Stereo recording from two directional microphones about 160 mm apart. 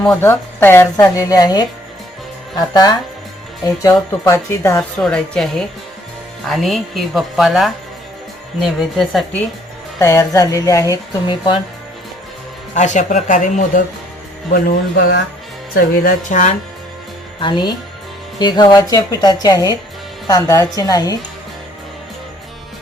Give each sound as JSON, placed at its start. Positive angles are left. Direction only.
{"t": 0.0, "sound": "a woman's voice", "side_deg": 10}
{"t": 4.9, "sound": "a woman's voice", "side_deg": 5}
{"t": 10.0, "sound": "a woman's voice", "side_deg": 15}
{"t": 12.7, "sound": "speech", "side_deg": 50}
{"t": 14.7, "sound": "speech", "side_deg": 80}
{"t": 16.0, "sound": "speech", "side_deg": 55}
{"t": 17.4, "sound": "a woman's voice", "side_deg": 30}